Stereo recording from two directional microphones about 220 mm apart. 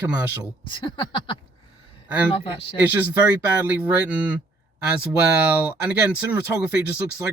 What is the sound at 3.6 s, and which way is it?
Speech, 10° right (ahead or behind).